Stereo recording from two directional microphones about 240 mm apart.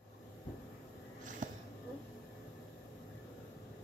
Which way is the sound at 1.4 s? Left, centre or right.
Right.